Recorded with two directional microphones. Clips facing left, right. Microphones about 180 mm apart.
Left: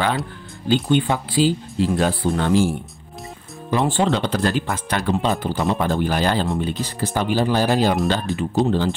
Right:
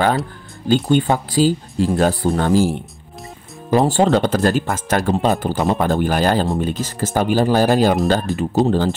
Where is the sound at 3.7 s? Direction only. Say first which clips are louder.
Right 5 dB; 40° right (ahead or behind).